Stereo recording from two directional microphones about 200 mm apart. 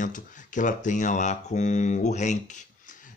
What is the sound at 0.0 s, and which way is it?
Speech, 40° left (ahead or behind).